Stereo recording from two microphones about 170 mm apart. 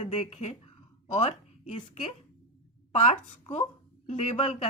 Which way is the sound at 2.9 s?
45° left (ahead or behind).